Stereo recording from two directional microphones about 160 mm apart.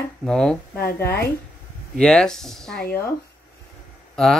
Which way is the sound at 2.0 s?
5° left (ahead or behind).